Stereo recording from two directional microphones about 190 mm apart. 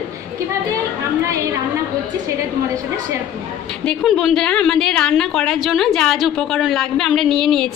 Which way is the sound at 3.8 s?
5° left (ahead or behind).